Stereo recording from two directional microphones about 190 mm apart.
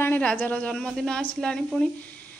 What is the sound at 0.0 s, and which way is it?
A woman's voice, 10° left (ahead or behind).